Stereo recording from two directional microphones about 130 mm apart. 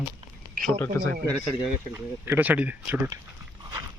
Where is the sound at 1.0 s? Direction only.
20° left (ahead or behind).